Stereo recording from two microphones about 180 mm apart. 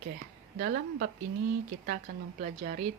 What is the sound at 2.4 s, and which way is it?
Speech, 50° right (ahead or behind).